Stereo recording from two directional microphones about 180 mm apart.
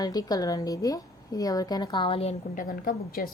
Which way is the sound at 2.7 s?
55° left (ahead or behind).